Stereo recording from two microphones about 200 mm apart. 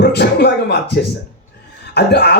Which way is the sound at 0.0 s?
55° left (ahead or behind).